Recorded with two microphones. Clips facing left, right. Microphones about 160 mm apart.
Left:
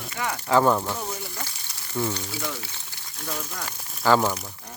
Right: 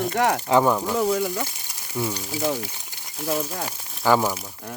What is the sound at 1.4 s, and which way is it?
Speech, 10° right (ahead or behind).